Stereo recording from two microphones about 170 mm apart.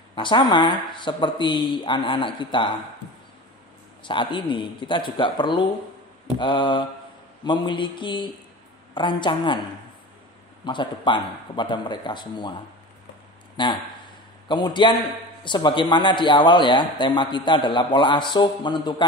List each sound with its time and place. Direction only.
0.1 s a man's voice: 30° left (ahead or behind)
4.0 s a man's voice: 30° left (ahead or behind)
10.6 s a man's voice: 30° left (ahead or behind)
14.5 s a man's voice: 25° left (ahead or behind)